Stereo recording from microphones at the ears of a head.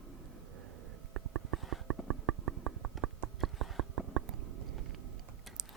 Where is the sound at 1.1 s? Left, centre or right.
Right.